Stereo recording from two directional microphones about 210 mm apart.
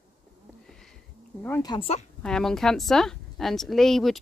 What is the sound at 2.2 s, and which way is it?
Speech, 5° left (ahead or behind).